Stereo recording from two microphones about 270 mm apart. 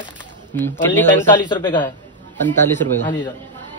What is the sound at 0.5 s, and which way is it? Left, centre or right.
A man's voice, centre.